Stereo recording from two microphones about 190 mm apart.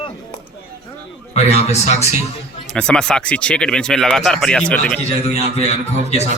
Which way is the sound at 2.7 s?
5° left (ahead or behind).